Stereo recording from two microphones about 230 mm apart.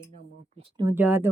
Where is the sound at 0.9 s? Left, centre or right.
Centre.